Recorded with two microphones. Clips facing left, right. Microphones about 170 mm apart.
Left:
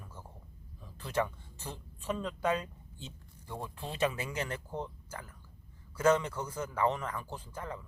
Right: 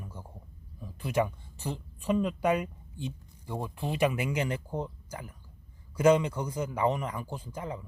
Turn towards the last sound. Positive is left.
turn(degrees=-15)  # may be behind; listen again after turning